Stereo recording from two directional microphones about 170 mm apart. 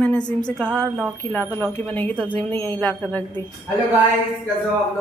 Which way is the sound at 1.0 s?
10° left (ahead or behind).